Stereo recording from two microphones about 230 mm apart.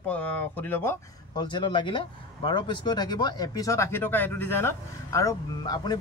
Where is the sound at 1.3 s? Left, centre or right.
Centre.